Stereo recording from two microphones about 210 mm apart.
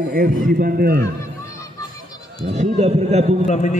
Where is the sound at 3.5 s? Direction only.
30° left (ahead or behind).